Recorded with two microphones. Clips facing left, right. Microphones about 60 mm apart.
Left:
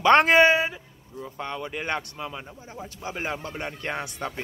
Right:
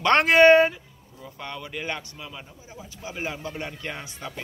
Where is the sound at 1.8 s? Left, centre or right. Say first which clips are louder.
Left 2 dB; left.